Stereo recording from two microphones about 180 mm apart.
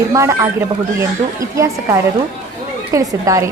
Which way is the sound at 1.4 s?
15° right (ahead or behind).